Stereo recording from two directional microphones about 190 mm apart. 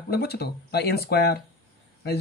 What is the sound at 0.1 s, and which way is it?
A man's voice, 55° left (ahead or behind).